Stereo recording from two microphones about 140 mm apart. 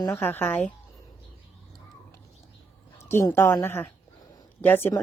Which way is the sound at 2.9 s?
20° left (ahead or behind).